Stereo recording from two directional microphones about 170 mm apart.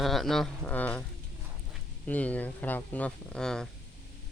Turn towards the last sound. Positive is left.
turn(degrees=5)  # may be behind; listen again after turning